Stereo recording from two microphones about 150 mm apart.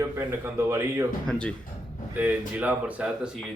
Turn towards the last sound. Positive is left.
turn(degrees=-10)  # may be behind; listen again after turning